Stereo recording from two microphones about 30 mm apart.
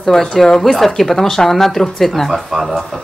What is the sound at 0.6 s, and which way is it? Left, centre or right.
Speech, centre.